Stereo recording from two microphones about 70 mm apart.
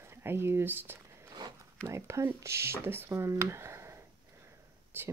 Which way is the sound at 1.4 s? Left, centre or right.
Right.